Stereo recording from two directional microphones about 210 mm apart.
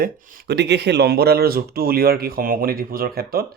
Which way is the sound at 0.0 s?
50° right (ahead or behind).